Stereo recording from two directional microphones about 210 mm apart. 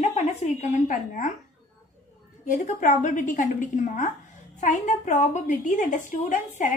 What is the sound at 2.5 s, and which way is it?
A woman's voice, 35° left (ahead or behind).